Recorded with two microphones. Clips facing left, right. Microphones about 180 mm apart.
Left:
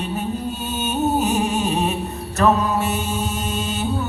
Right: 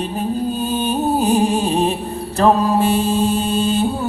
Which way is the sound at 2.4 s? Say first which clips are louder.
Right 4 dB; 30° right (ahead or behind).